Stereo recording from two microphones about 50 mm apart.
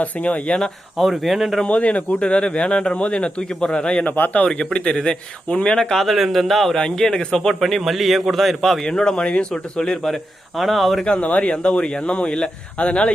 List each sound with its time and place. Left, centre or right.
0.0 s a man's voice: left
0.9 s speech: centre
1.6 s a man's voice: left
4.0 s a man's voice: left
4.4 s speech: centre
6.1 s speech: centre
6.7 s speech: centre
7.4 s speech: centre
8.9 s speech: centre
10.6 s speech: centre
11.0 s a man's voice: left